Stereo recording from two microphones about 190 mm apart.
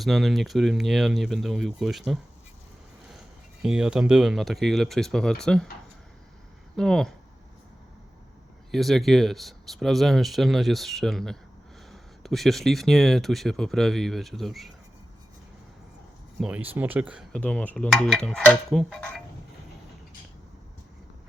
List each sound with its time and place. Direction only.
0.0 s speech: centre (ahead or behind)
6.7 s speech: 5° left (ahead or behind)
8.7 s speech: centre (ahead or behind)
16.4 s speech: 10° right (ahead or behind)
17.3 s speech: 5° left (ahead or behind)